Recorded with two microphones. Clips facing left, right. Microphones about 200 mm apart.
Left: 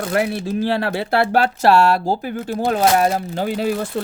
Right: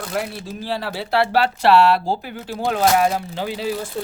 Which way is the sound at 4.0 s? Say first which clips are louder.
Left 3 dB; 70° left (ahead or behind).